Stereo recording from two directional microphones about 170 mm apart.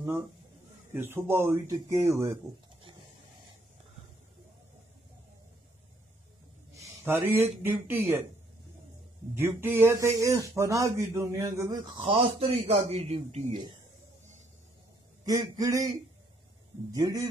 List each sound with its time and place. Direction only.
0.9 s speech: 15° right (ahead or behind)
6.7 s a man's voice: 20° right (ahead or behind)
9.3 s speech: 15° right (ahead or behind)
12.0 s a man's voice: 35° right (ahead or behind)
15.2 s a man's voice: 20° right (ahead or behind)
16.9 s a man's voice: 20° right (ahead or behind)